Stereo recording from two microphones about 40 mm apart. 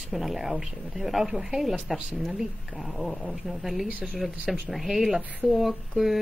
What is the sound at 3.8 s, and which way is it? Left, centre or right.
Speech, right.